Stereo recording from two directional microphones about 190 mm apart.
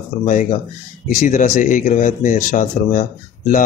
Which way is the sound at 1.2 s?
40° left (ahead or behind).